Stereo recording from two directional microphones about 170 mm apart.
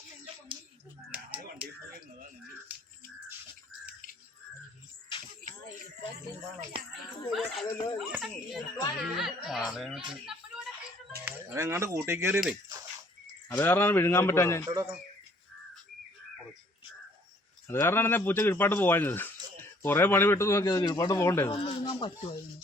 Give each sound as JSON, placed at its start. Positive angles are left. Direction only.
{"t": 1.1, "sound": "a sound", "side_deg": -10}
{"t": 2.7, "sound": "a sound", "side_deg": -10}
{"t": 7.3, "sound": "speech", "side_deg": 0}
{"t": 10.2, "sound": "a sound", "side_deg": -5}
{"t": 11.3, "sound": "speech", "side_deg": -15}
{"t": 13.5, "sound": "a man's voice", "side_deg": 15}
{"t": 14.7, "sound": "speech", "side_deg": -20}
{"t": 17.7, "sound": "a man's voice", "side_deg": 15}
{"t": 21.5, "sound": "speech", "side_deg": 30}